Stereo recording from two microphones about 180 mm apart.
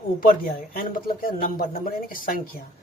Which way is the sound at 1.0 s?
55° left (ahead or behind).